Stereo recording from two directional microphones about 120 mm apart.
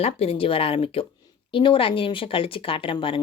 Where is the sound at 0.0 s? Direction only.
55° left (ahead or behind).